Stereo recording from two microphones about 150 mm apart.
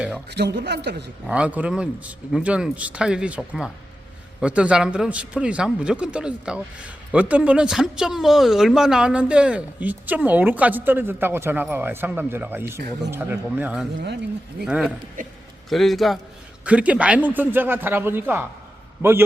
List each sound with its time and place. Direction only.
0.3 s a man's voice: 90° right
1.3 s a man's voice: 10° right (ahead or behind)
15.2 s a man's voice: 65° right (ahead or behind)
15.7 s a man's voice: centre (ahead or behind)